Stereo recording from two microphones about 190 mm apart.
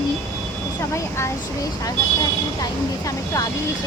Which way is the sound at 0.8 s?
15° left (ahead or behind).